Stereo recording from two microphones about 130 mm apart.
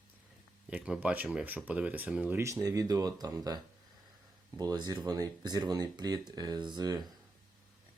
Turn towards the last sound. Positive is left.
turn(degrees=-30)  # may be behind; listen again after turning